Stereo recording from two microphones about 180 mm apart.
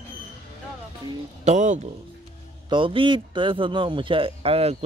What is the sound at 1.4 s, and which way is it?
Speech, 40° right (ahead or behind).